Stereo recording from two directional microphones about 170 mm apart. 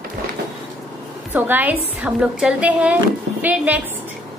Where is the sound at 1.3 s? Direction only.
10° right (ahead or behind).